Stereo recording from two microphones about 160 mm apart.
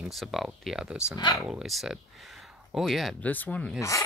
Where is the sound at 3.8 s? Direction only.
20° left (ahead or behind).